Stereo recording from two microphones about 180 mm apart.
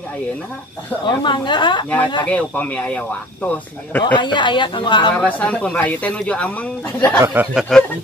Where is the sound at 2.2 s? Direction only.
10° left (ahead or behind).